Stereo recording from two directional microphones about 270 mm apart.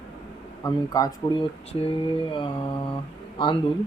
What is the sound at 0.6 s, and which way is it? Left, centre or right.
Speech, centre.